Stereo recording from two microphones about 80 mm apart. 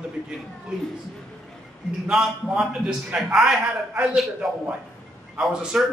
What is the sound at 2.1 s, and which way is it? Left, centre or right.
A man's voice, centre.